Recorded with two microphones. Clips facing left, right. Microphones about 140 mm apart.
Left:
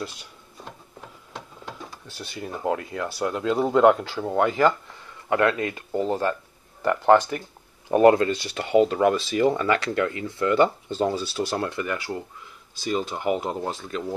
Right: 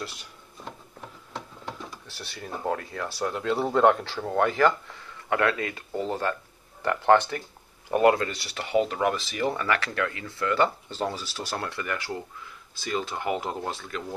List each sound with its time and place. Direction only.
2.0 s speech: 15° left (ahead or behind)
6.8 s speech: 10° left (ahead or behind)
7.9 s speech: 25° left (ahead or behind)